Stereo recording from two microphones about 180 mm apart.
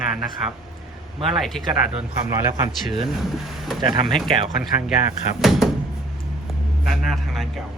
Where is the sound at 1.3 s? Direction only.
Centre (ahead or behind).